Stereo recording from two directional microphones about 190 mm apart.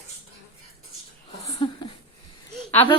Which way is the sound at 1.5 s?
25° left (ahead or behind).